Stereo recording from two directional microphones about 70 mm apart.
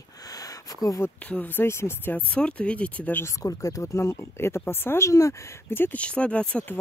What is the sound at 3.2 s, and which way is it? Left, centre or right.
Speech, left.